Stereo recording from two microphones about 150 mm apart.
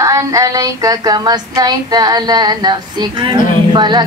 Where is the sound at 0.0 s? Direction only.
20° right (ahead or behind).